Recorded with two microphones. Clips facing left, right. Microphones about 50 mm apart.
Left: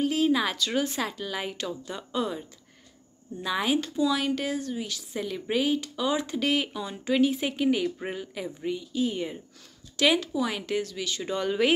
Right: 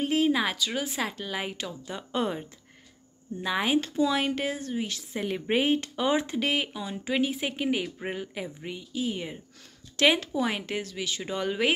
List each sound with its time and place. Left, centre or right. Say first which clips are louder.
0.0 s speech: even; right
0.3 s speech: left 1 dB; centre
2.1 s a woman's voice: right 1 dB; right
3.3 s a woman's voice: even; centre
6.3 s speech: left 1 dB; centre
9.9 s speech: even; right; by 11.7 s centre